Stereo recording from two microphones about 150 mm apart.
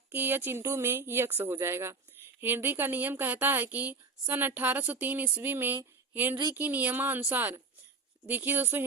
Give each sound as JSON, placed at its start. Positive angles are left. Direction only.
{"t": 0.1, "sound": "a woman's voice", "side_deg": -15}